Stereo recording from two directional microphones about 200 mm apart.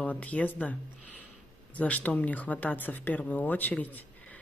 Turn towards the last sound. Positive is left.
turn(degrees=10)  # may be behind; listen again after turning